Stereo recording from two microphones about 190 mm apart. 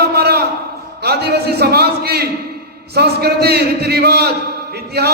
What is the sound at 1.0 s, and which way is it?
A man's voice, 60° right (ahead or behind).